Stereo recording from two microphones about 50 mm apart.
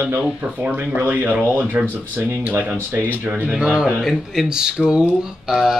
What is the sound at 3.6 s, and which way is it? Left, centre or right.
Speech, centre.